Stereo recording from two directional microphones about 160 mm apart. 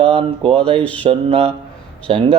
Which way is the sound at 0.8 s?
10° left (ahead or behind).